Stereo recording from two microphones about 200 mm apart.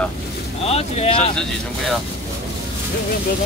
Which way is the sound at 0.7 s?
30° left (ahead or behind).